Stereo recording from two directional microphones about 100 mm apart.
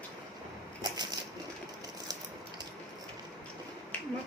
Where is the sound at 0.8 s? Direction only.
40° right (ahead or behind).